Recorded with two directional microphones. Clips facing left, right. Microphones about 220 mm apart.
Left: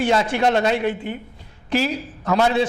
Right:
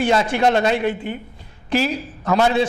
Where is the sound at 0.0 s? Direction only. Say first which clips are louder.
Right 1 dB; 15° right (ahead or behind).